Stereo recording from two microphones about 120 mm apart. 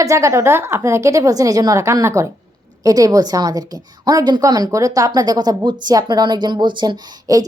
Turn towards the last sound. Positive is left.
turn(degrees=-35)  # may be behind; listen again after turning